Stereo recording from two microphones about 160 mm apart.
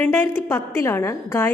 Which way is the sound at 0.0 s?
15° left (ahead or behind).